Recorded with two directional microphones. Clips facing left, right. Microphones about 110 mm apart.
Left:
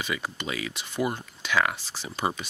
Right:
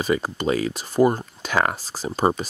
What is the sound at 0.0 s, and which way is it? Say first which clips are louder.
Speech: right 10 dB; 40° right (ahead or behind).